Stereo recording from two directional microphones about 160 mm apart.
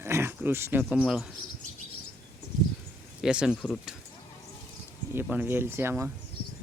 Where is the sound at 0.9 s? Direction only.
Centre (ahead or behind).